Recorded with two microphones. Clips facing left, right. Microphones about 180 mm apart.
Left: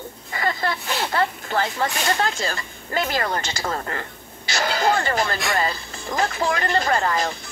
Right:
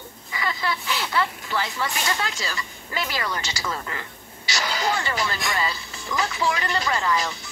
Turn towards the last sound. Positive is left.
turn(degrees=50)  # may be behind; listen again after turning